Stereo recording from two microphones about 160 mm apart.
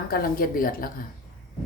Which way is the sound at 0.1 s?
65° left (ahead or behind).